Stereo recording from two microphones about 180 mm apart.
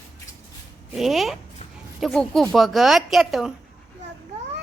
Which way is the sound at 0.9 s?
Centre (ahead or behind).